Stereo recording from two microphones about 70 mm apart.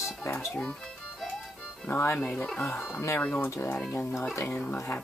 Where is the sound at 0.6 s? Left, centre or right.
Centre.